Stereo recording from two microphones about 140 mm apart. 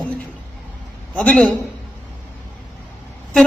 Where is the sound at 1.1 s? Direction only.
5° left (ahead or behind).